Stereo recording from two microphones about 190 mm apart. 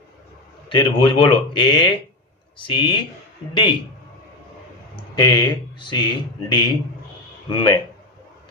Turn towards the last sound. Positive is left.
turn(degrees=25)  # may be behind; listen again after turning